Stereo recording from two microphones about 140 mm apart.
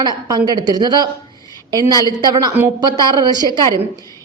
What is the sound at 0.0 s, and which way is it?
A woman's voice, 30° right (ahead or behind).